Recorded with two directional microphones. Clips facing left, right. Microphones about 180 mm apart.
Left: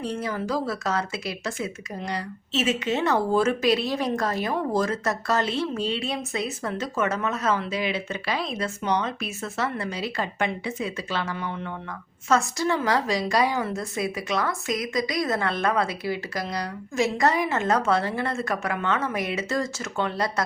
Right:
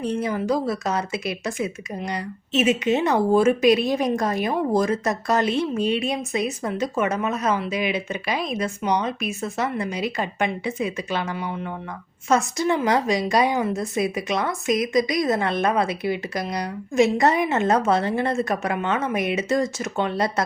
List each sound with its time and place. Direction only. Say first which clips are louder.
0.0 s speech: right 4 dB; 20° right (ahead or behind)